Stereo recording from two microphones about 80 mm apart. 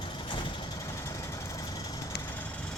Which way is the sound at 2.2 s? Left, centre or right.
Left.